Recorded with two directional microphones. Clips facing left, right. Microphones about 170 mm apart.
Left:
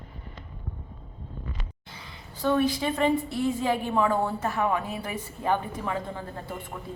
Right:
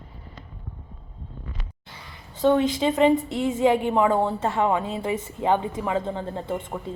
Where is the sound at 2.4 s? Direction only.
20° right (ahead or behind).